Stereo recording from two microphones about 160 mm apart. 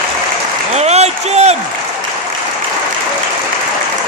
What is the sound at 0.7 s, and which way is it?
Applause, 45° right (ahead or behind).